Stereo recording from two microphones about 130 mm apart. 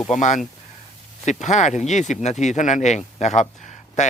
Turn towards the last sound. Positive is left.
turn(degrees=65)  # may be behind; listen again after turning